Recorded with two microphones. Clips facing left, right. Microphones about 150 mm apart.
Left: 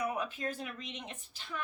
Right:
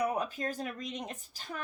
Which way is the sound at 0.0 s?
40° right (ahead or behind).